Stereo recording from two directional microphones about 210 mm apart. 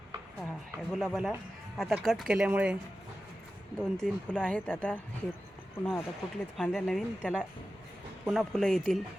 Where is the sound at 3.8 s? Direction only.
Centre (ahead or behind).